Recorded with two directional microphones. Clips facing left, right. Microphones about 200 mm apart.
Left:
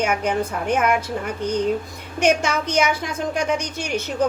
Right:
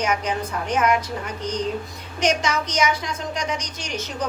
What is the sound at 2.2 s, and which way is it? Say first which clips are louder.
A woman's voice: left 3 dB; 55° left (ahead or behind).